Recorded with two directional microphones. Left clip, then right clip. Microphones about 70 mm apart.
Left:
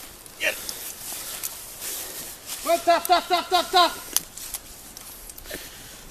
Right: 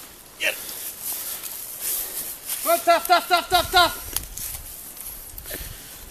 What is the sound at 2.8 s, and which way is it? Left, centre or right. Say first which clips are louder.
Speech: right 2 dB; right.